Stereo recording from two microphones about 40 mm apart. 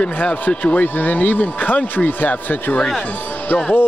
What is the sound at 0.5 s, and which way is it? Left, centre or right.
Speech, left.